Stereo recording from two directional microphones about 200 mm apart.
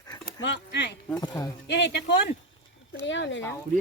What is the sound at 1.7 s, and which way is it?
Speech, 55° left (ahead or behind).